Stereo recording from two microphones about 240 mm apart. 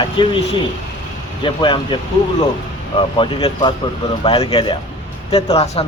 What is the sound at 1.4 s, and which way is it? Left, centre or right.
Speech, centre.